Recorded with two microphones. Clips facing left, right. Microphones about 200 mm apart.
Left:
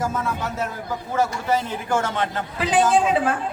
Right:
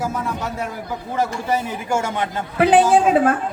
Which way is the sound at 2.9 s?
50° right (ahead or behind).